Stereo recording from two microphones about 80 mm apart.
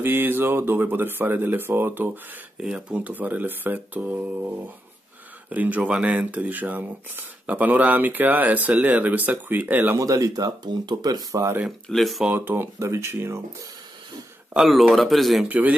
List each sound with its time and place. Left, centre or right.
0.0 s speech: right
2.6 s speech: centre
5.5 s speech: right
9.9 s speech: right
11.9 s speech: centre
12.4 s speech: right
14.5 s speech: centre
15.4 s speech: centre